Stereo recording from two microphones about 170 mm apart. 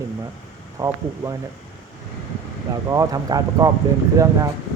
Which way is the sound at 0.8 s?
15° right (ahead or behind).